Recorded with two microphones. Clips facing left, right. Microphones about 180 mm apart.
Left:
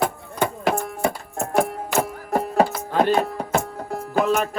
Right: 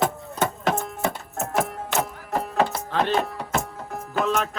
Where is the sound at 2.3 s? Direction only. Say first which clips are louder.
Left 4 dB; 45° left (ahead or behind).